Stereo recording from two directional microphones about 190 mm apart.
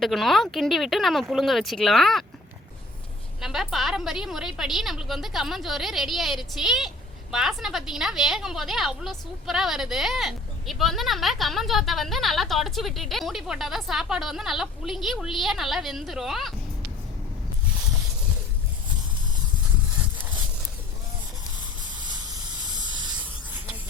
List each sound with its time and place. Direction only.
0.0 s a woman's voice: centre (ahead or behind)
3.4 s a woman's voice: centre (ahead or behind)
22.0 s hiss: 20° right (ahead or behind)